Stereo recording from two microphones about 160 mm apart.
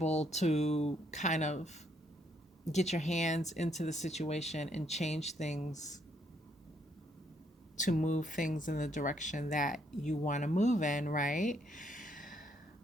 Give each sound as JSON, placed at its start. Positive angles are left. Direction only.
{"t": 0.0, "sound": "speech", "side_deg": 45}
{"t": 7.8, "sound": "speech", "side_deg": 50}